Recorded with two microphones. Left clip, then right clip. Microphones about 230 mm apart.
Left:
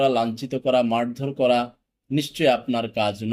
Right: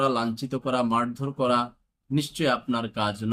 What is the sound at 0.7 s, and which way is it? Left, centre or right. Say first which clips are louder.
Speech: left 4 dB; right.